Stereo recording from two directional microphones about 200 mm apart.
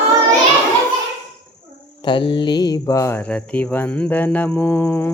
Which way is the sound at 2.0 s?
25° left (ahead or behind).